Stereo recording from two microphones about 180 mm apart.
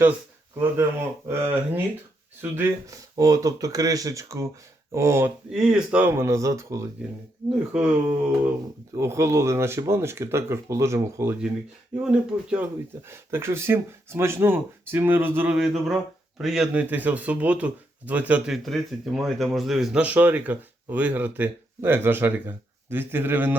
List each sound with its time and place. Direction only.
1.3 s speech: 15° right (ahead or behind)
5.5 s speech: 5° right (ahead or behind)
7.5 s speech: 5° right (ahead or behind)